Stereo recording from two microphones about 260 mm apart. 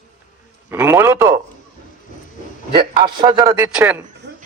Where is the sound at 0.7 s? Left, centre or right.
Centre.